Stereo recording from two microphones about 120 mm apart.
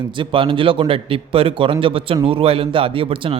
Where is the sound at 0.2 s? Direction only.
45° right (ahead or behind).